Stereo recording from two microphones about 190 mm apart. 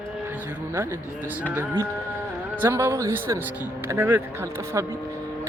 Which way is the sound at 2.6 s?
15° right (ahead or behind).